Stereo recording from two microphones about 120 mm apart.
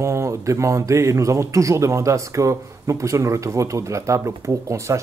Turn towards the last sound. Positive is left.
turn(degrees=-25)  # may be behind; listen again after turning